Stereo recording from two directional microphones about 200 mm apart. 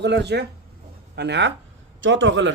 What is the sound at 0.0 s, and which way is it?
A man's voice, 60° right (ahead or behind).